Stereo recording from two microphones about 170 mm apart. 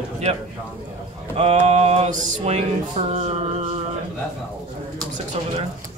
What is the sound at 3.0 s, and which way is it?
Music, 40° right (ahead or behind).